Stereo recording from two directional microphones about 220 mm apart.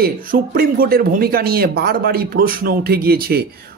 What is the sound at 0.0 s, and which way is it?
Speech, 40° right (ahead or behind).